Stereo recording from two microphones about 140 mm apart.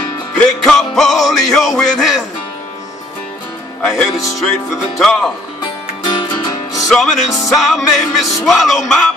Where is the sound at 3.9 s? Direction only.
25° left (ahead or behind).